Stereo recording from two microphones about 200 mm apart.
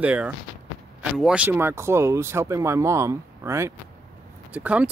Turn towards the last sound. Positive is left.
turn(degrees=-5)  # may be behind; listen again after turning